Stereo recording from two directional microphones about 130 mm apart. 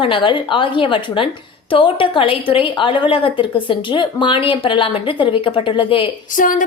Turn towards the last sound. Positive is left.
turn(degrees=90)